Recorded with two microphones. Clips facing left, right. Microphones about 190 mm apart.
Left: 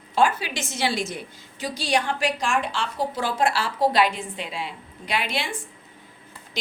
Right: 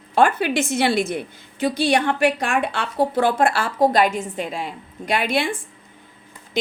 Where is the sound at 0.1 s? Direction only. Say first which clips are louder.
Right 4 dB; 55° right (ahead or behind).